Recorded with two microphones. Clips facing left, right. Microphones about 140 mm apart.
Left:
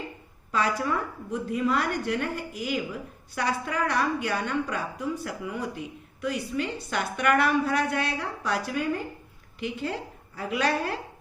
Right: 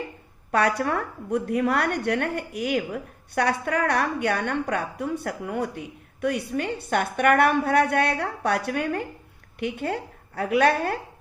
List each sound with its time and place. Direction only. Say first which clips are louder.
0.5 s a woman's voice: right 4 dB; 60° right (ahead or behind)